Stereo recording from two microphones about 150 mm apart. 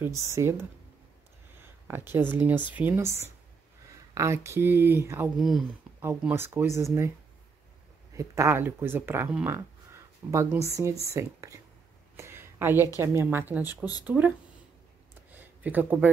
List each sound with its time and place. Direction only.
0.0 s speech: 20° right (ahead or behind)
1.6 s a sound: 15° right (ahead or behind)
2.3 s speech: 10° right (ahead or behind)
5.4 s speech: centre (ahead or behind)
5.9 s speech: 15° right (ahead or behind)
8.1 s speech: 20° right (ahead or behind)
12.2 s a sound: 15° right (ahead or behind)
13.0 s speech: 15° right (ahead or behind)
15.3 s a sound: 10° right (ahead or behind)